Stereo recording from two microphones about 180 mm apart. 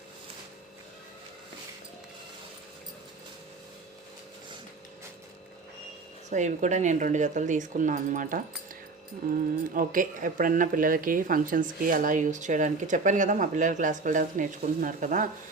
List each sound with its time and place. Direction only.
6.3 s speech: 40° right (ahead or behind)
9.6 s speech: 50° right (ahead or behind)